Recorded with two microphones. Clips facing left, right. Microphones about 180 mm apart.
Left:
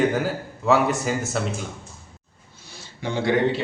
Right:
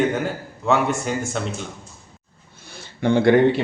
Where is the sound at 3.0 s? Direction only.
55° right (ahead or behind).